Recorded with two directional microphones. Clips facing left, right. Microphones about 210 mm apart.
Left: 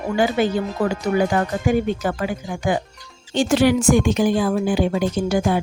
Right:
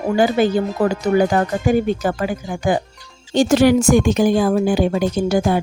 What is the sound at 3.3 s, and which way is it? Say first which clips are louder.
A woman's voice: right 4 dB; 40° right (ahead or behind).